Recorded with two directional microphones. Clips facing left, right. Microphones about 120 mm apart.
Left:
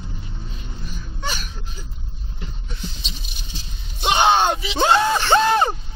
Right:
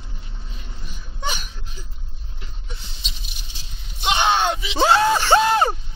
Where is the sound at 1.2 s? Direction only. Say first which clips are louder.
Right 1 dB; 20° right (ahead or behind).